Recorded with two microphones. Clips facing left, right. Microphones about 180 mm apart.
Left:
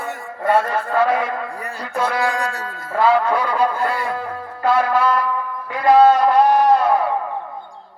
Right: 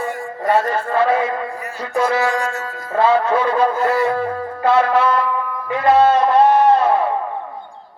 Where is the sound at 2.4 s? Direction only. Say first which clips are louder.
Right 2 dB; 35° left (ahead or behind).